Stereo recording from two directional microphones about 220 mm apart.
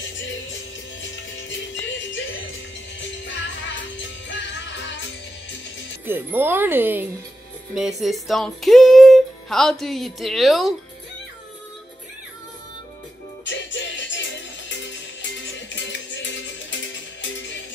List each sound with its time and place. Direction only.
0.2 s music: 55° left (ahead or behind)
2.0 s music: 60° left (ahead or behind)
6.0 s speech: 10° right (ahead or behind)
8.0 s music: centre (ahead or behind)
13.5 s music: 55° left (ahead or behind)